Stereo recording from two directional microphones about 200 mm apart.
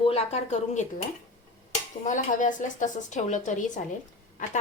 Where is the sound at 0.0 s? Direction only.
30° left (ahead or behind).